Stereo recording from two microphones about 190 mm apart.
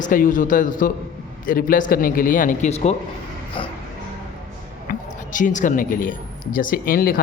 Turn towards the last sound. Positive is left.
turn(degrees=50)  # may be behind; listen again after turning